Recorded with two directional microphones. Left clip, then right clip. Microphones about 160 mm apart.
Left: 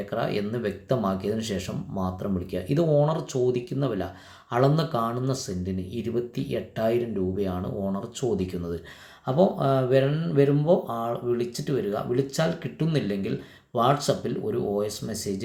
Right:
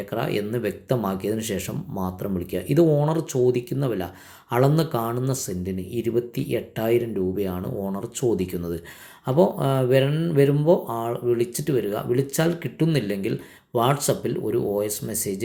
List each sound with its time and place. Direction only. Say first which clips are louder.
0.1 s speech: right 2 dB; 15° right (ahead or behind)